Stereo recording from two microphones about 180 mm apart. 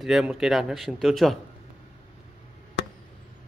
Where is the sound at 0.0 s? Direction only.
Centre (ahead or behind).